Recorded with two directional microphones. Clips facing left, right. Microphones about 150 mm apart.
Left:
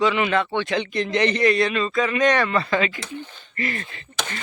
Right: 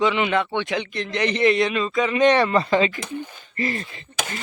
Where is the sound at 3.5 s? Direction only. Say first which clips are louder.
Right 2 dB; 30° right (ahead or behind).